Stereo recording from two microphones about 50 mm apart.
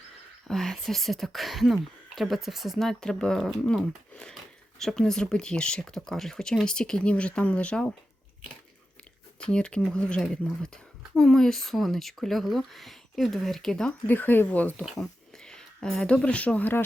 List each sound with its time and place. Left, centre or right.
0.4 s speech: centre
2.7 s speech: centre
3.3 s speech: centre
4.1 s speech: centre
9.4 s speech: centre
11.1 s speech: centre
14.1 s speech: left
15.4 s speech: centre